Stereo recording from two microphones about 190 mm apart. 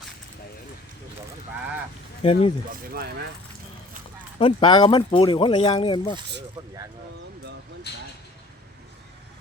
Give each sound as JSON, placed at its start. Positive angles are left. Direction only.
{"t": 2.2, "sound": "speech", "side_deg": 30}
{"t": 2.9, "sound": "speech", "side_deg": -55}
{"t": 4.4, "sound": "speech", "side_deg": 25}